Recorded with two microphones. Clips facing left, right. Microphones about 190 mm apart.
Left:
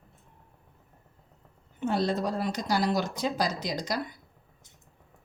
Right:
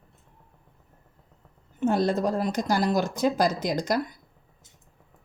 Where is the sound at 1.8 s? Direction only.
50° right (ahead or behind).